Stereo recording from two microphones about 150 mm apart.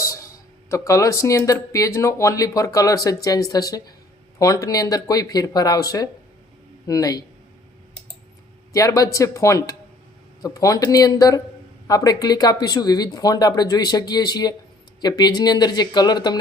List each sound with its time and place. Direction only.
0.7 s speech: 20° left (ahead or behind)
8.7 s speech: 20° left (ahead or behind)